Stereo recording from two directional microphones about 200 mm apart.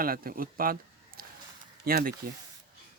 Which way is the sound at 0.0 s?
45° right (ahead or behind).